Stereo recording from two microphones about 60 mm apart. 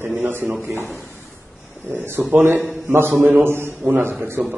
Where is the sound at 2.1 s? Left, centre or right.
Right.